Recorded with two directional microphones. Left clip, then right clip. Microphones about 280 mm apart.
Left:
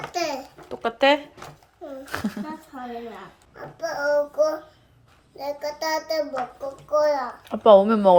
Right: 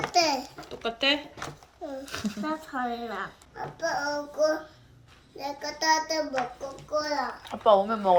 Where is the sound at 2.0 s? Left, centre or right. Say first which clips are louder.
Left 5 dB; centre.